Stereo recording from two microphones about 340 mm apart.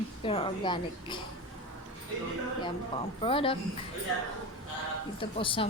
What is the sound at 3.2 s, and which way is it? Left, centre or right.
Speech, centre.